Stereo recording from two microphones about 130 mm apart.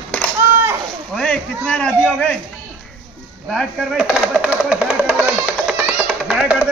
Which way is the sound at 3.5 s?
Centre (ahead or behind).